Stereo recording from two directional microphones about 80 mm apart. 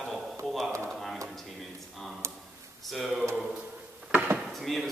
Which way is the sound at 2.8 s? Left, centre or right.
Centre.